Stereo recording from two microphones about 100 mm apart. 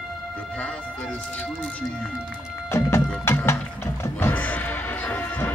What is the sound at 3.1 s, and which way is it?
Music, 25° left (ahead or behind).